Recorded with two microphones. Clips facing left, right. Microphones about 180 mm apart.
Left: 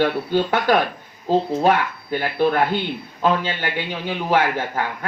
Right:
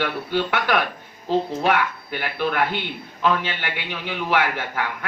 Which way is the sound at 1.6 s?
40° left (ahead or behind).